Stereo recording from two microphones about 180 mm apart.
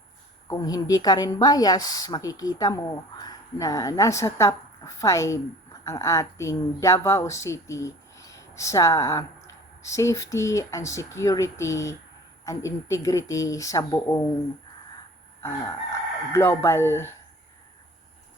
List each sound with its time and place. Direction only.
0.4 s a woman's voice: 20° left (ahead or behind)
16.3 s speech: 15° left (ahead or behind)